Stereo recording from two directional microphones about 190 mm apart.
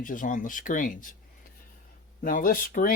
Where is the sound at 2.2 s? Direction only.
45° left (ahead or behind).